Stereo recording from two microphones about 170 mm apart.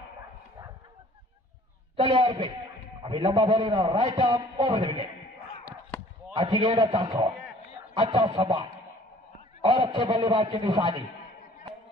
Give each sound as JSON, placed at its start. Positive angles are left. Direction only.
{"t": 2.0, "sound": "a man's voice", "side_deg": -30}
{"t": 6.3, "sound": "a man's voice", "side_deg": -35}